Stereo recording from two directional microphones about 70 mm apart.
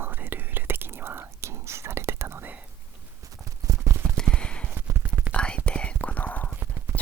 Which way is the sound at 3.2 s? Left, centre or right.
Right.